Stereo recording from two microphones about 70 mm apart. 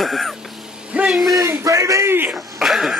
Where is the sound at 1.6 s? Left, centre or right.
Right.